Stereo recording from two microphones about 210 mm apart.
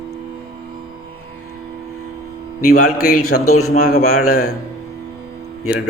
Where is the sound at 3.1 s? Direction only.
90° left.